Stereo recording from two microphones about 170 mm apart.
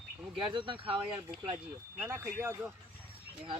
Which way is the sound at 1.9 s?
15° right (ahead or behind).